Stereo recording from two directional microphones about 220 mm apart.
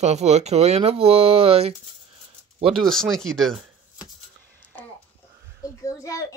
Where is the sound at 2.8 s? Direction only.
Centre (ahead or behind).